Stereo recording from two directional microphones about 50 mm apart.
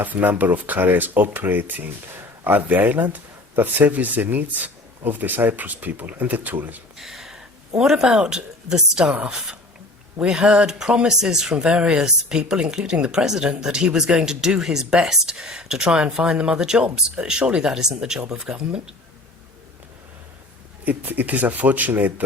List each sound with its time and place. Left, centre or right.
0.0 s speech: right
6.9 s speech: centre
10.2 s speech: centre
20.8 s speech: right